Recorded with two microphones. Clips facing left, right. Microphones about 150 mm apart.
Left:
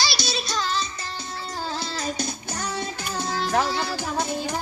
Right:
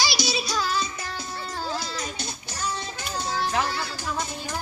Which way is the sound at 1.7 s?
30° left (ahead or behind).